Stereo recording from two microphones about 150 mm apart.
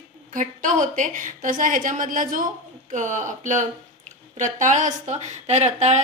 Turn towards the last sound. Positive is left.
turn(degrees=-50)  # may be behind; listen again after turning